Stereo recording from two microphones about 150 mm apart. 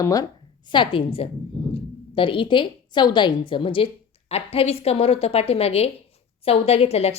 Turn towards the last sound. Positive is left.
turn(degrees=45)  # may be behind; listen again after turning